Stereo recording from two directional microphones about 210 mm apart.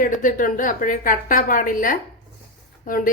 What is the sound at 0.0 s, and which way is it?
Speech, 40° left (ahead or behind).